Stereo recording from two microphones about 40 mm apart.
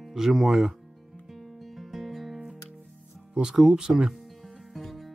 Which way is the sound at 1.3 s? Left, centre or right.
Centre.